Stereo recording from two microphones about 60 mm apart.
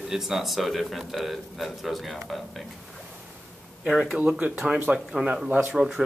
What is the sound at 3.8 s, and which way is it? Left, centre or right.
Speech, centre.